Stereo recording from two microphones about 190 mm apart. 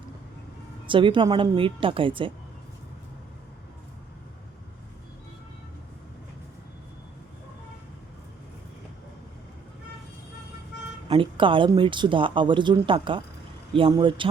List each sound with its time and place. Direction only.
0.9 s speech: 25° right (ahead or behind)
11.1 s speech: 25° right (ahead or behind)